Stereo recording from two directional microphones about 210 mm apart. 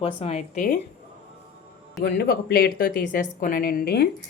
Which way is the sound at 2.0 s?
45° left (ahead or behind).